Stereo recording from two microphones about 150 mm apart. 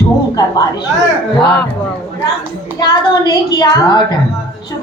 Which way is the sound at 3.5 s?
25° left (ahead or behind).